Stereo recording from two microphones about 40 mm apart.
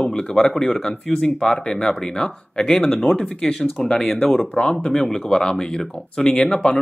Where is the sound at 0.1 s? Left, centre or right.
Centre.